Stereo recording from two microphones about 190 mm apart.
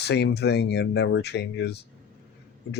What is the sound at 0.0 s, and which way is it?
Speech, 60° left (ahead or behind).